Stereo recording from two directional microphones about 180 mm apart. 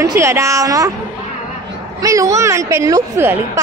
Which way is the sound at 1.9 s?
20° right (ahead or behind).